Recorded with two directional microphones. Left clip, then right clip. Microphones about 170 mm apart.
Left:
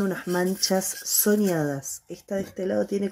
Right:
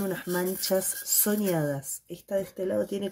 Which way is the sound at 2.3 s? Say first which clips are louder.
Left 1 dB; 35° left (ahead or behind).